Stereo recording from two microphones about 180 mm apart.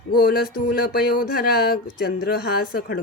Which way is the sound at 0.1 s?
55° left (ahead or behind).